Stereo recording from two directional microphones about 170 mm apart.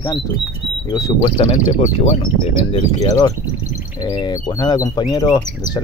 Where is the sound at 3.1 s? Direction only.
25° left (ahead or behind).